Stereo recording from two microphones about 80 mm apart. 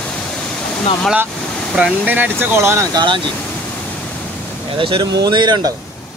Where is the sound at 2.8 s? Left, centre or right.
Right.